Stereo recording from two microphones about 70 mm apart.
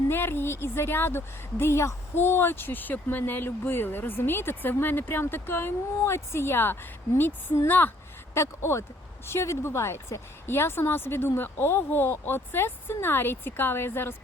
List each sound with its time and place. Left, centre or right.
0.1 s a woman's voice: left
7.7 s a sound: left
8.4 s a woman's voice: left